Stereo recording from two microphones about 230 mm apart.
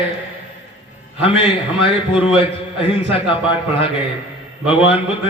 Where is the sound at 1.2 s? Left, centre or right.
Left.